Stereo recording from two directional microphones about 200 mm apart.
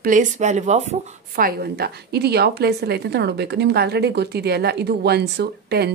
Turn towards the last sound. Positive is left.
turn(degrees=-55)  # may be behind; listen again after turning